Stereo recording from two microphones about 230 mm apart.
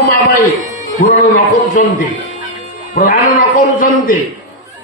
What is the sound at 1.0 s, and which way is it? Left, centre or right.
Speech, left.